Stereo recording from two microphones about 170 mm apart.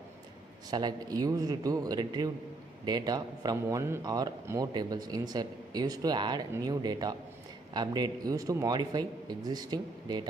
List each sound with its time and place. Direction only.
0.7 s a man's voice: 25° right (ahead or behind)